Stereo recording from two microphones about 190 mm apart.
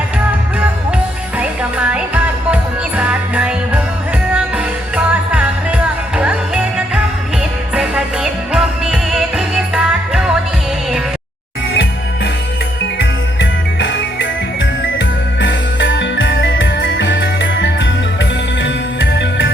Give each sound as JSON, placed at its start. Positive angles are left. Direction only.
{"t": 1.4, "sound": "music", "side_deg": -5}
{"t": 11.7, "sound": "music", "side_deg": 80}